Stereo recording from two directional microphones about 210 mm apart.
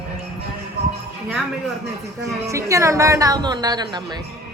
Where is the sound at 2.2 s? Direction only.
15° right (ahead or behind).